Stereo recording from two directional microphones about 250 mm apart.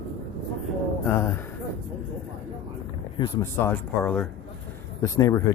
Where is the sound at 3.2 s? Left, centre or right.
Centre.